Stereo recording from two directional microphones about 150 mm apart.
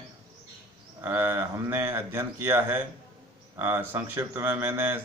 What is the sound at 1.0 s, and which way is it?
Speech, 15° right (ahead or behind).